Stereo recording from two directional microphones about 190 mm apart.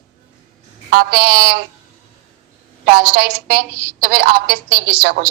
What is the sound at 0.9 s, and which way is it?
Speech, 55° right (ahead or behind).